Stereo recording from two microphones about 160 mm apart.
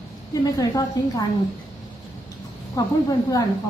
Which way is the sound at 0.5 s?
20° left (ahead or behind).